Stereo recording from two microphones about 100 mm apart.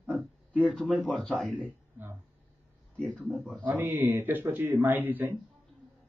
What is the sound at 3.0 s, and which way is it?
Mantra, 15° left (ahead or behind).